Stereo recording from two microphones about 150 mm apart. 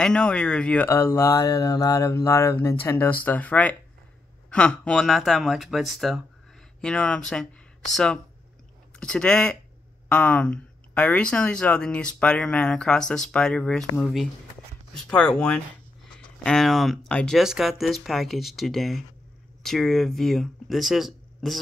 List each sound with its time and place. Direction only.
0.0 s speech: 5° left (ahead or behind)